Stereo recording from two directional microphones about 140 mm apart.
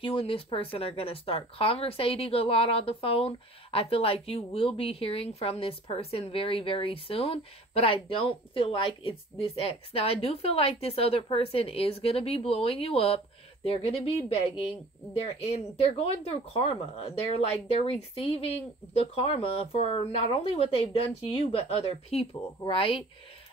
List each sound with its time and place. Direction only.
0.0 s speech: 40° left (ahead or behind)